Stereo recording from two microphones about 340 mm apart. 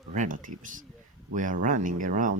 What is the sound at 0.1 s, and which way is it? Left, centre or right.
Speech, right.